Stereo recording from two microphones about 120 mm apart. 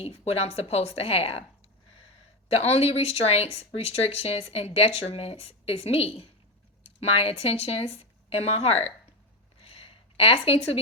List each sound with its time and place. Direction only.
0.0 s speech: 60° left (ahead or behind)
2.5 s speech: 60° left (ahead or behind)
9.6 s a sound: 55° left (ahead or behind)